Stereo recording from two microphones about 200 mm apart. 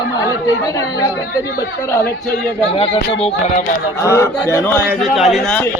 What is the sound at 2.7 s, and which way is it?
Speech, 30° left (ahead or behind).